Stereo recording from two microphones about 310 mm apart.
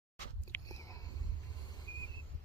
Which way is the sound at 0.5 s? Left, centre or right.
Centre.